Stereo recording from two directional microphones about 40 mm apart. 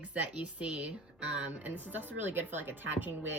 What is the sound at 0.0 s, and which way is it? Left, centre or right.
Speech, right.